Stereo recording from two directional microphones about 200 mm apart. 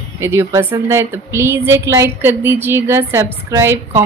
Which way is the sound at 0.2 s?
15° right (ahead or behind).